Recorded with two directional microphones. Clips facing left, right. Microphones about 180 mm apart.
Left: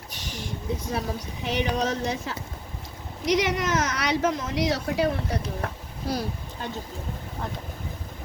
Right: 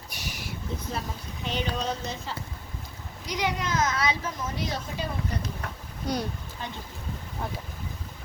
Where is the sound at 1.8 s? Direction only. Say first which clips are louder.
Left 5 dB; 75° left (ahead or behind).